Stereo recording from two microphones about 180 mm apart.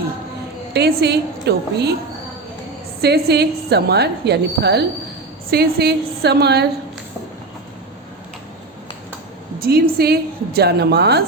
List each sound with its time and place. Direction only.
0.7 s a woman's voice: 65° right (ahead or behind)
3.0 s a woman's voice: 65° right (ahead or behind)
9.6 s a woman's voice: 60° right (ahead or behind)